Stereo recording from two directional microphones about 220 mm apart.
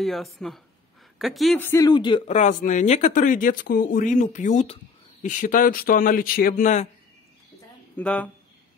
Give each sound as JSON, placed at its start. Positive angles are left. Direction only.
{"t": 0.0, "sound": "speech", "side_deg": 0}
{"t": 2.2, "sound": "speech", "side_deg": 35}
{"t": 7.9, "sound": "speech", "side_deg": 5}